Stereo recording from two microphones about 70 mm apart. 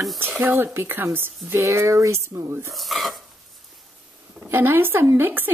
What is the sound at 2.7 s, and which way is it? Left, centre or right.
Speech, centre.